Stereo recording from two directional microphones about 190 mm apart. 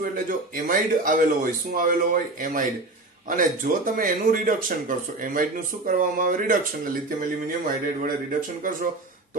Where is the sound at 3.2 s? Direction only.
45° right (ahead or behind).